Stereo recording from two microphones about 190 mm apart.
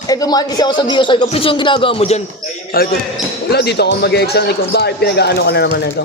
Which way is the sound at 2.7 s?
50° left (ahead or behind).